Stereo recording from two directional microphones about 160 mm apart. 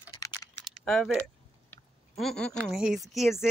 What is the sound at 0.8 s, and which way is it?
Speech, centre (ahead or behind).